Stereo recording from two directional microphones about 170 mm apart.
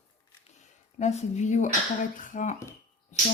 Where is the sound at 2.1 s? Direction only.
50° left (ahead or behind).